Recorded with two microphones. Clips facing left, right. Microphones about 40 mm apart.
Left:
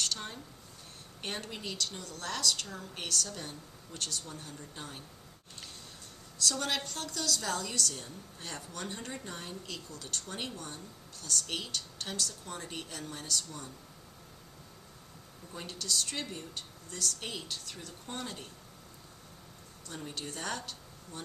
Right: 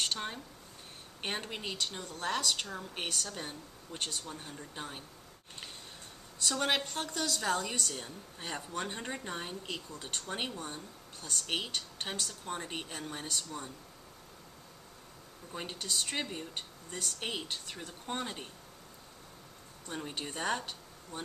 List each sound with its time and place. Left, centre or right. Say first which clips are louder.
0.0 s a woman's voice: right 2 dB; right
6.4 s a woman's voice: right 2 dB; right
15.5 s a woman's voice: even; right
19.9 s speech: right 2 dB; right